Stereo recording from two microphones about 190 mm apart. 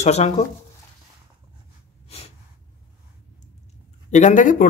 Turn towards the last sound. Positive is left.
turn(degrees=45)  # may be behind; listen again after turning